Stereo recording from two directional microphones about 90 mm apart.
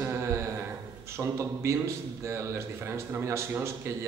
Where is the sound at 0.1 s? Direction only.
30° right (ahead or behind).